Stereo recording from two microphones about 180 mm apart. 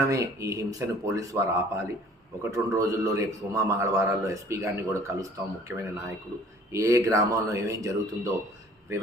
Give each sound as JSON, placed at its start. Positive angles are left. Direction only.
{"t": 0.1, "sound": "a man's voice", "side_deg": -15}